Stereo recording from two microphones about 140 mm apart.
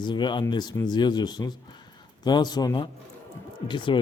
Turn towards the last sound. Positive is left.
turn(degrees=35)  # may be behind; listen again after turning